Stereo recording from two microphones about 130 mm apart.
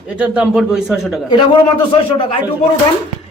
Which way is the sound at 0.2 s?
5° right (ahead or behind).